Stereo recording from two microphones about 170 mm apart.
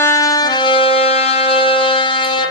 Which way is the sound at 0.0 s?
20° left (ahead or behind).